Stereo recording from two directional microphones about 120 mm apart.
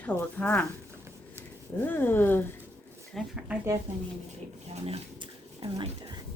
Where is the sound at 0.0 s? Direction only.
15° left (ahead or behind).